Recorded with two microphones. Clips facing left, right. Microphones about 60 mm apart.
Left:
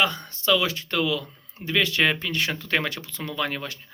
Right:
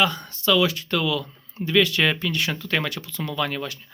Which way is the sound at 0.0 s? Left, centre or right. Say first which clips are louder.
Right 2 dB; left.